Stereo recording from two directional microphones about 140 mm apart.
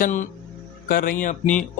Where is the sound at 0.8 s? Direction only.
90° left; by 1.6 s 65° left (ahead or behind).